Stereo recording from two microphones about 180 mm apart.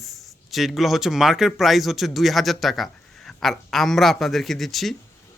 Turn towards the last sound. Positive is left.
turn(degrees=0)  # may be behind; listen again after turning